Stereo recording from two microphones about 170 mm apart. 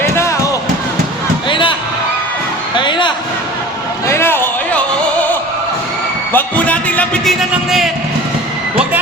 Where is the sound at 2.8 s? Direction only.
30° left (ahead or behind).